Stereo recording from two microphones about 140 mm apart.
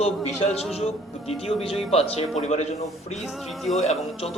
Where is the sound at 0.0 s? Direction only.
45° left (ahead or behind).